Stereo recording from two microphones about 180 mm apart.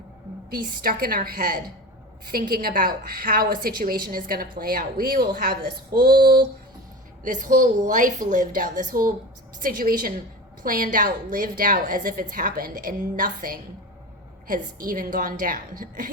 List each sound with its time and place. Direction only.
0.5 s a woman's voice: 55° right (ahead or behind)
7.3 s a woman's voice: 50° right (ahead or behind)